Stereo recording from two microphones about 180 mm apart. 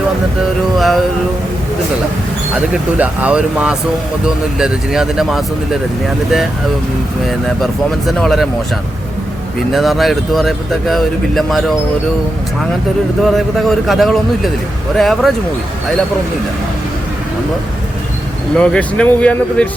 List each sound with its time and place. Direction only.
0.8 s speech: centre (ahead or behind)
2.6 s speech: 5° right (ahead or behind)
7.3 s speech: centre (ahead or behind)
9.7 s speech: centre (ahead or behind)
13.2 s speech: centre (ahead or behind)
18.5 s speech: 5° left (ahead or behind)